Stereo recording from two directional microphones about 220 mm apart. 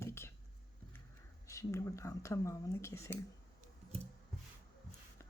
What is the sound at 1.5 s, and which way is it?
Speech, 15° left (ahead or behind).